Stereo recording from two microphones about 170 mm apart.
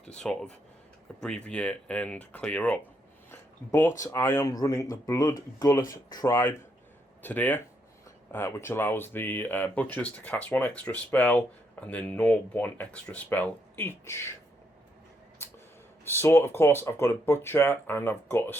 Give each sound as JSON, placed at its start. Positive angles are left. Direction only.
{"t": 0.0, "sound": "speech", "side_deg": 5}
{"t": 16.0, "sound": "speech", "side_deg": 15}